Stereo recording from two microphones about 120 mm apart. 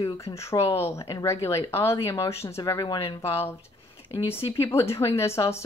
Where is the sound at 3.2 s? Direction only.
20° left (ahead or behind).